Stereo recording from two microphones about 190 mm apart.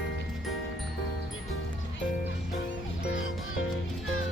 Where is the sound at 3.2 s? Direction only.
90° left.